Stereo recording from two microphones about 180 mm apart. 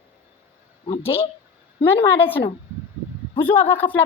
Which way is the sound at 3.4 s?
10° left (ahead or behind).